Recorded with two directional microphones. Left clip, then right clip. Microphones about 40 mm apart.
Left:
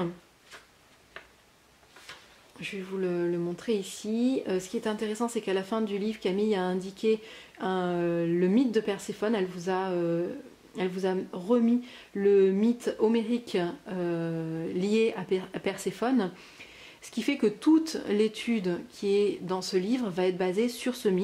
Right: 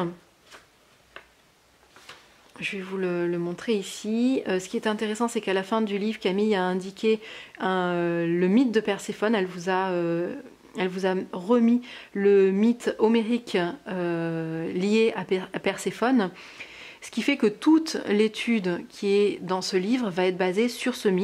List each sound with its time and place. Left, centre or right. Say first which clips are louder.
2.6 s speech: right 4 dB; right